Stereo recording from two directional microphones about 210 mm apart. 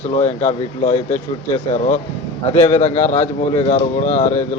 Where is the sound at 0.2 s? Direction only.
30° left (ahead or behind).